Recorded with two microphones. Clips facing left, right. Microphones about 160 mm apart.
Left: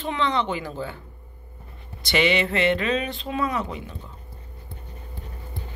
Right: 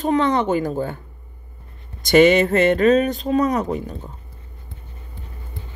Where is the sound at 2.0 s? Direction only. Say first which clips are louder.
Right 9 dB; 45° right (ahead or behind).